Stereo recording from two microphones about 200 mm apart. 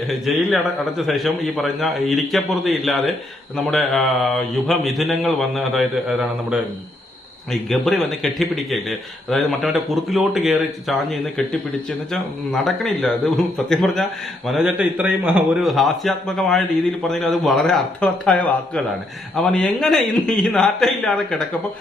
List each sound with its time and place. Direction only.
0.1 s speech: centre (ahead or behind)